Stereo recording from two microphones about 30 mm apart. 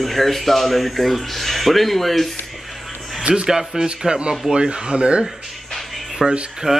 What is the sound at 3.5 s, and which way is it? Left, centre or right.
Speech, centre.